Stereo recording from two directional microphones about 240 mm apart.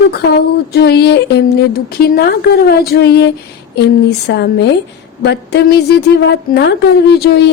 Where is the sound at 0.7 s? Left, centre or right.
Left.